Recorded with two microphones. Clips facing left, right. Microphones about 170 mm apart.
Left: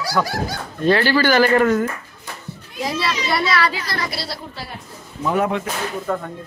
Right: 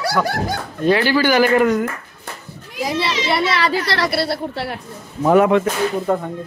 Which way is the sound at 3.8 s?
80° right.